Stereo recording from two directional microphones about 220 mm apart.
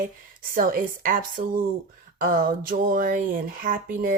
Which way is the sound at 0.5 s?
40° right (ahead or behind).